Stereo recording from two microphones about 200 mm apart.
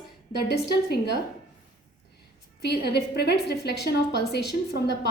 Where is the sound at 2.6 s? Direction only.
55° left (ahead or behind).